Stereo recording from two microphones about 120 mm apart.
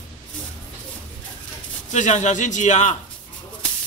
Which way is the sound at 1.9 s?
75° left (ahead or behind).